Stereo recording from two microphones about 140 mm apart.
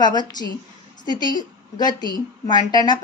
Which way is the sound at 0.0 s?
30° left (ahead or behind).